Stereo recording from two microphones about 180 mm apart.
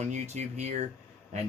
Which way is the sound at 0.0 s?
40° right (ahead or behind).